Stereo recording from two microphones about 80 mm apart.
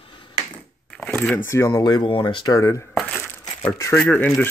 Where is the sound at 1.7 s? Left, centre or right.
Left.